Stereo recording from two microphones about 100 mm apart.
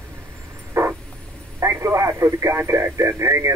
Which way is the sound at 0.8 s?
30° right (ahead or behind).